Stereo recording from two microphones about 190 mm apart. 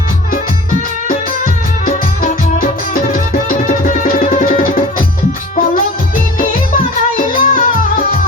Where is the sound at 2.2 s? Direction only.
45° left (ahead or behind).